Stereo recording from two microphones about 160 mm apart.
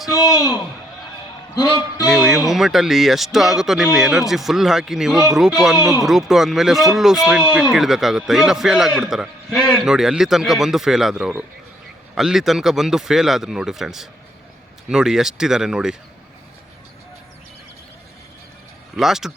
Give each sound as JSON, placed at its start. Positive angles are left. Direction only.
{"t": 0.1, "sound": "a man's voice", "side_deg": 20}
{"t": 1.6, "sound": "a man's voice", "side_deg": 25}
{"t": 2.0, "sound": "music", "side_deg": -5}
{"t": 2.5, "sound": "speech", "side_deg": 0}
{"t": 18.9, "sound": "speech", "side_deg": 0}